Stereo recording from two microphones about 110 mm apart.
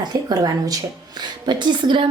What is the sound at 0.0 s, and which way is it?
A woman's voice, 35° right (ahead or behind).